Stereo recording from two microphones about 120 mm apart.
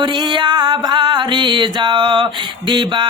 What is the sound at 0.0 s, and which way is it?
Music, 40° right (ahead or behind).